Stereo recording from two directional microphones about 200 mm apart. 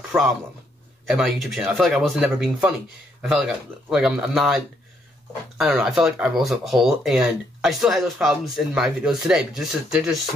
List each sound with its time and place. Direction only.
1.1 s speech: centre (ahead or behind)